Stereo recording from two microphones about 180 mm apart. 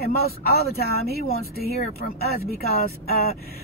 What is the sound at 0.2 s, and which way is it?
Speech, 60° left (ahead or behind).